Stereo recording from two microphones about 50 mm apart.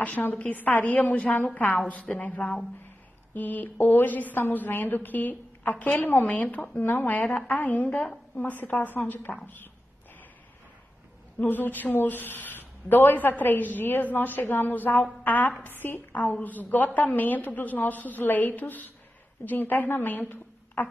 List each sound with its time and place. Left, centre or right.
0.0 s speech: left
11.4 s a woman's voice: left